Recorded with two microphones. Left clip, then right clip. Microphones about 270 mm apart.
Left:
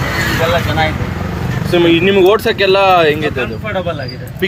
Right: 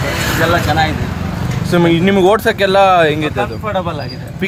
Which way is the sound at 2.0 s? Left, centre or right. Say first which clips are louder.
Left 2 dB; right.